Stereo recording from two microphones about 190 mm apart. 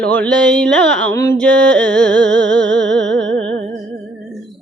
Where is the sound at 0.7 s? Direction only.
5° left (ahead or behind).